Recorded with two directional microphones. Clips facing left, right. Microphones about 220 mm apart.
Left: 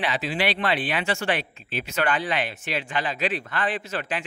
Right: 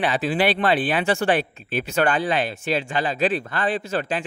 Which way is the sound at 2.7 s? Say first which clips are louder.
Right 4 dB; 30° right (ahead or behind).